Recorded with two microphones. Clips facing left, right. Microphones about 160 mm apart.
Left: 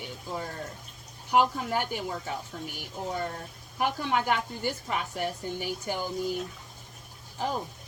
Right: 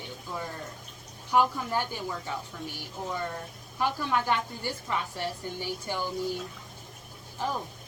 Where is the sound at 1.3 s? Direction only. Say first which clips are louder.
Left 1 dB; 15° left (ahead or behind).